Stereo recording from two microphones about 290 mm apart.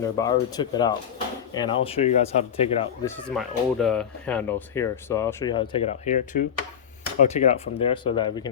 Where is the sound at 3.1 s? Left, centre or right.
Centre.